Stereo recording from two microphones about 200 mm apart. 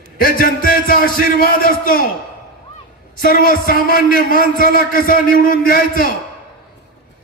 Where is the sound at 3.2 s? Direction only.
45° left (ahead or behind).